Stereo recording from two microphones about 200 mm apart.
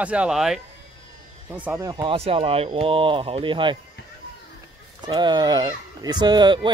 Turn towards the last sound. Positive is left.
turn(degrees=-20)  # may be behind; listen again after turning